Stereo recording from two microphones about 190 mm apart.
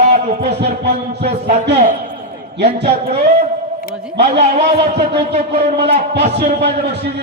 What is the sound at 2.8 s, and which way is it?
Speech, 35° right (ahead or behind).